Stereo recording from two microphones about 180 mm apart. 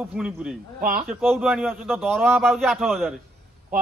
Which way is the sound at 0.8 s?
55° right (ahead or behind).